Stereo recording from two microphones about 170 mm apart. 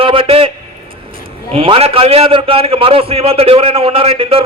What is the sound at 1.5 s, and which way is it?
A man's voice, 35° right (ahead or behind).